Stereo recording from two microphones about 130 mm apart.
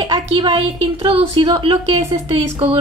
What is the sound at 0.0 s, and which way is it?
A woman's voice, 40° right (ahead or behind).